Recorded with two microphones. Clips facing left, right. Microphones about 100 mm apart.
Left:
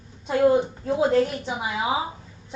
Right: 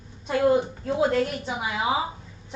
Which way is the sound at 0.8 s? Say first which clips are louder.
Left 3 dB; 25° left (ahead or behind).